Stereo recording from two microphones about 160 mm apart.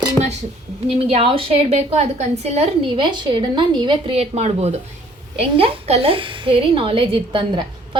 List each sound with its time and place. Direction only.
0.9 s a woman's voice: 35° right (ahead or behind)